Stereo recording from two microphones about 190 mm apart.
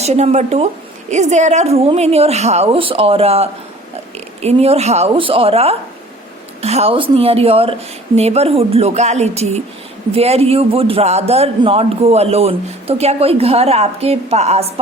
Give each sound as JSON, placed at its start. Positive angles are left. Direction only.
{"t": 0.0, "sound": "a man's voice", "side_deg": -35}